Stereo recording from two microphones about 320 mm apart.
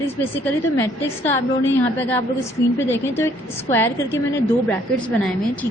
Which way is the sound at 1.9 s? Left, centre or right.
Centre.